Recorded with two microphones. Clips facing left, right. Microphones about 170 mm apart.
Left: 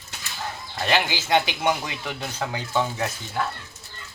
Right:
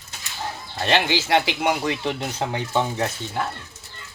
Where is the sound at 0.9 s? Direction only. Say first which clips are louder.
Right 2 dB; 25° right (ahead or behind).